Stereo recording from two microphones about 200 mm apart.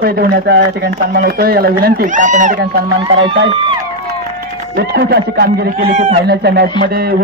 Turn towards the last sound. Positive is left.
turn(degrees=-50)  # may be behind; listen again after turning